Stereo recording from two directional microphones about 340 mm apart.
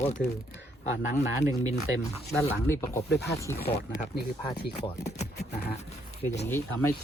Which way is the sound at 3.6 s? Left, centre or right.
Left.